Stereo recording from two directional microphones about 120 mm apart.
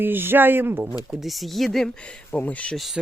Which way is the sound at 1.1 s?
Centre (ahead or behind).